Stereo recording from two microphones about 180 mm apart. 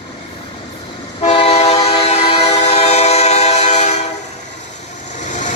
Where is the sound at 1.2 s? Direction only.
35° left (ahead or behind).